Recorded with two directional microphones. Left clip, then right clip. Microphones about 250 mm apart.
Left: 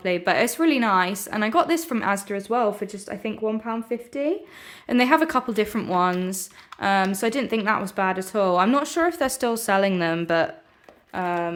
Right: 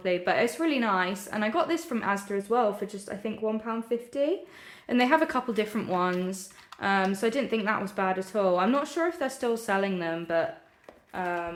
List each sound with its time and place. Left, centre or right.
0.0 s speech: left